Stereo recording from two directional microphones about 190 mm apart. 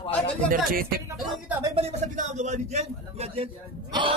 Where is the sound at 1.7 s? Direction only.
35° right (ahead or behind).